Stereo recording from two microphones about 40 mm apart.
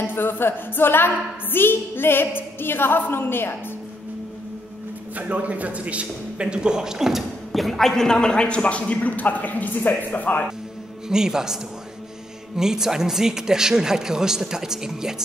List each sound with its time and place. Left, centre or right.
0.0 s a woman's voice: left
5.1 s a man's voice: right; by 10.4 s left
11.1 s speech: centre
12.5 s speech: centre